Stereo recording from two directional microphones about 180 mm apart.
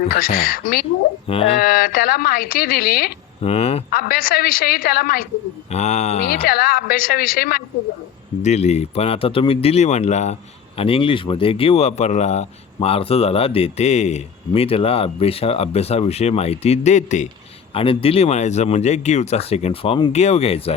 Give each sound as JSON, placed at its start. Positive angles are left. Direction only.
{"t": 0.1, "sound": "a woman's voice", "side_deg": 55}
{"t": 3.4, "sound": "speech", "side_deg": 35}
{"t": 3.9, "sound": "a woman's voice", "side_deg": 55}
{"t": 5.7, "sound": "speech", "side_deg": 40}
{"t": 6.2, "sound": "a woman's voice", "side_deg": 55}
{"t": 8.4, "sound": "speech", "side_deg": 40}